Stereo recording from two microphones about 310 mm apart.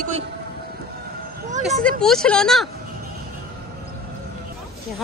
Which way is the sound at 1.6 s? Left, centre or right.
Centre.